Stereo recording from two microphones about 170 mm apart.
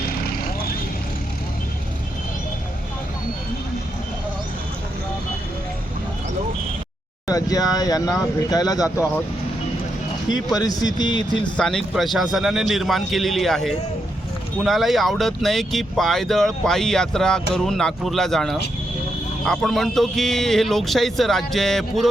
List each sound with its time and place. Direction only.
7.3 s speech: 20° left (ahead or behind)
10.3 s speech: 20° left (ahead or behind)
11.5 s speech: 5° left (ahead or behind)